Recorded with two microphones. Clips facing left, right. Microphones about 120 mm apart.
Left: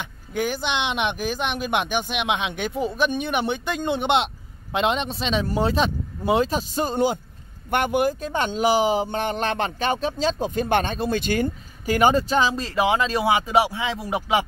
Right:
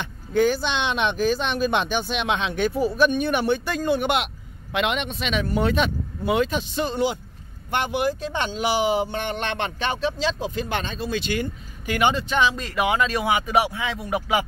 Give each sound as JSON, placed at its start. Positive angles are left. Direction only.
{"t": 0.0, "sound": "speech", "side_deg": 15}